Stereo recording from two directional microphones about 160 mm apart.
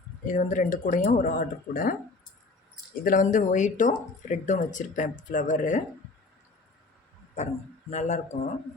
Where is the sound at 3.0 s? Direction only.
55° left (ahead or behind).